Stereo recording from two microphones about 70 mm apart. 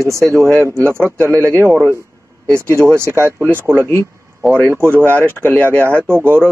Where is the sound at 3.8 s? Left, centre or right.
Left.